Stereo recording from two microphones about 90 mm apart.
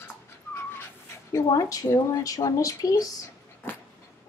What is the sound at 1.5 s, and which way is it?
Speech, 40° left (ahead or behind).